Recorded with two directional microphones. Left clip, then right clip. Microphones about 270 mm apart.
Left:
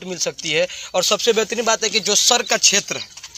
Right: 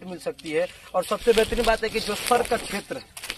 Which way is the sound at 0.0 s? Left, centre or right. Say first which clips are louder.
Left 8 dB; left.